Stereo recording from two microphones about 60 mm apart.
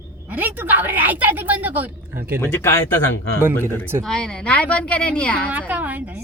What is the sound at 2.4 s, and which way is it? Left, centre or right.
Speech, left.